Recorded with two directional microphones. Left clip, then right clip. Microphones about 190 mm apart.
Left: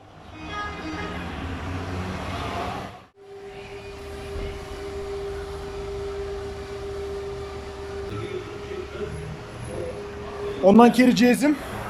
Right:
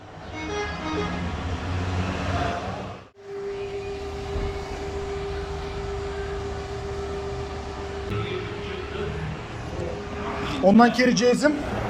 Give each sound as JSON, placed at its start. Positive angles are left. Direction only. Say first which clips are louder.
{"t": 10.7, "sound": "a man's voice", "louder": "left 2 dB", "side_deg": 15}